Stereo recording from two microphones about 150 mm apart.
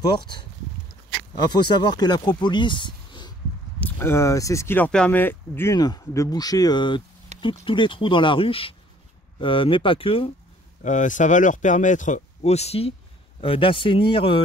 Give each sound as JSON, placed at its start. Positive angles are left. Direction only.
{"t": 0.0, "sound": "speech", "side_deg": 30}
{"t": 1.5, "sound": "speech", "side_deg": 30}
{"t": 3.8, "sound": "speech", "side_deg": 15}
{"t": 5.8, "sound": "speech", "side_deg": 25}
{"t": 10.8, "sound": "speech", "side_deg": 55}